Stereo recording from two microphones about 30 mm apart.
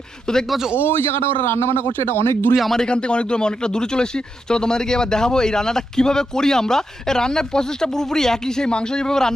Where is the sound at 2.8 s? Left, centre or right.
Left.